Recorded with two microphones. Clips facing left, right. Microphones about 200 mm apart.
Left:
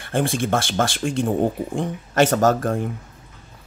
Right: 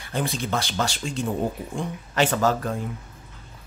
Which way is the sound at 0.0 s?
50° left (ahead or behind).